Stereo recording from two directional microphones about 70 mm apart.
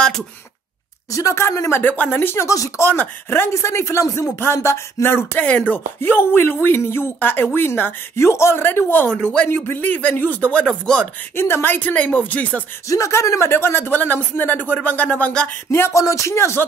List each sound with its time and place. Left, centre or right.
1.1 s speech: left
1.8 s speech: left
2.4 s speech: left
2.8 s speech: left
5.4 s speech: centre
5.9 s speech: left
8.2 s speech: left; by 9.5 s centre
9.5 s speech: left; by 11.1 s centre
11.3 s speech: left
12.8 s speech: left; by 15.5 s centre
15.7 s speech: left